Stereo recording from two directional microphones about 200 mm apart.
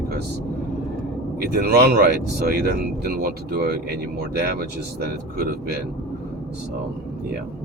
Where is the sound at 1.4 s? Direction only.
50° right (ahead or behind).